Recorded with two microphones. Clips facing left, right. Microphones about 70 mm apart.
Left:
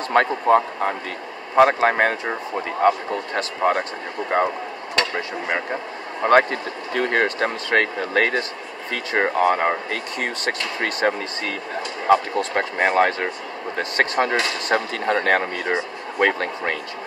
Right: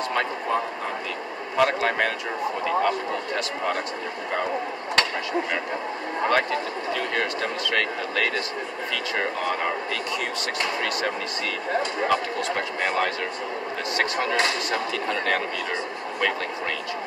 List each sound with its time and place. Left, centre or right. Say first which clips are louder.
0.1 s speech: left 12 dB; left
1.6 s speech: left 6 dB; left
3.3 s speech: left 9 dB; left
6.2 s speech: left 7 dB; left